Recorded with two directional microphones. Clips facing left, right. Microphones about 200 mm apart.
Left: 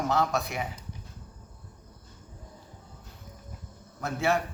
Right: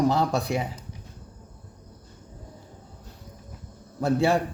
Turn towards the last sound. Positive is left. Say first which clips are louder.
# right 6 dB
turn(degrees=-30)  # may be behind; listen again after turning